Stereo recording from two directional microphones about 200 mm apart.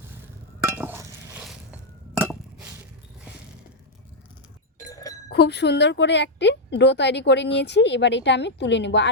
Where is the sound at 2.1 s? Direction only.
5° right (ahead or behind).